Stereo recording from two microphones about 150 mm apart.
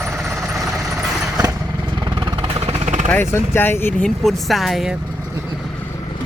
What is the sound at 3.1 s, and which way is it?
Speech, 15° left (ahead or behind).